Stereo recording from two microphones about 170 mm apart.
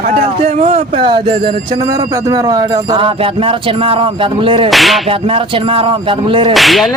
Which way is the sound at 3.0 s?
30° right (ahead or behind).